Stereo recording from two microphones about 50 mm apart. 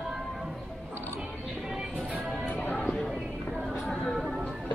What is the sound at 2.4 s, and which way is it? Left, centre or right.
Music, left.